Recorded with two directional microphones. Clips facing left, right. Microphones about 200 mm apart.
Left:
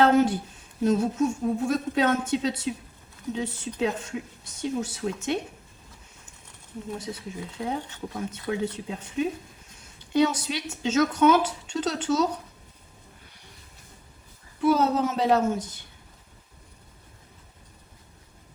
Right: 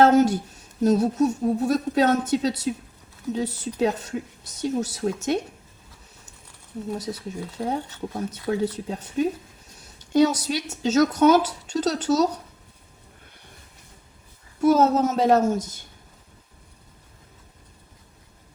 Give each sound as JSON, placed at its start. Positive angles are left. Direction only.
{"t": 0.0, "sound": "speech", "side_deg": -40}
{"t": 7.1, "sound": "a woman's voice", "side_deg": -40}
{"t": 14.6, "sound": "a woman's voice", "side_deg": -45}